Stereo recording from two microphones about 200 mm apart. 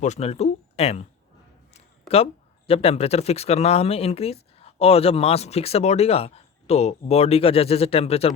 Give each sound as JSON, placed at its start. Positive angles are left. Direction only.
{"t": 0.0, "sound": "speech", "side_deg": 35}